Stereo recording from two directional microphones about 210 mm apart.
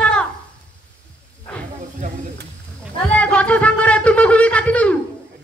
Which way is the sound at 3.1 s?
5° left (ahead or behind).